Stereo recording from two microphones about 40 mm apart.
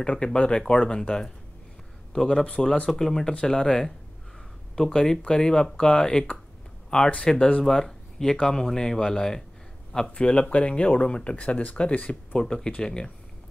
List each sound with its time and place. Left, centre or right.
0.0 s speech: left
2.6 s speech: centre
7.6 s speech: centre
10.1 s speech: left
12.4 s speech: centre